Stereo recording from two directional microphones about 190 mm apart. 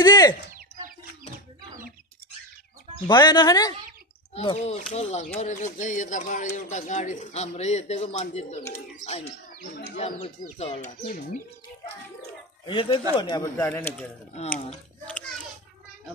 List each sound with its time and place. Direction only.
0.0 s bird: 20° left (ahead or behind)
3.1 s speech: 20° left (ahead or behind)
4.3 s speech: 30° left (ahead or behind)
10.6 s speech: 45° left (ahead or behind)
12.6 s speech: 25° left (ahead or behind); by 14.0 s 10° left (ahead or behind)
15.0 s a child's voice: 5° left (ahead or behind)